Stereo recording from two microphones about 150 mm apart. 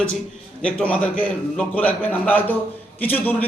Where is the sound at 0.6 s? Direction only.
10° left (ahead or behind).